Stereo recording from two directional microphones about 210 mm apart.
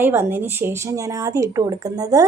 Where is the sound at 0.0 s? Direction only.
10° right (ahead or behind).